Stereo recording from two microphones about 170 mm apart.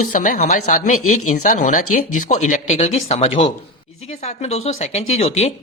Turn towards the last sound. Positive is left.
turn(degrees=40)  # may be behind; listen again after turning